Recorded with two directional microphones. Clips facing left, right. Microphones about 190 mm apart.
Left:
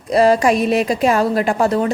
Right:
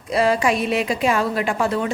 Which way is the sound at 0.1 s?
40° left (ahead or behind).